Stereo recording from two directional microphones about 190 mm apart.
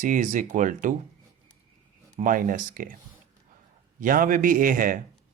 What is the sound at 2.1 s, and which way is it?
Speech, 45° right (ahead or behind).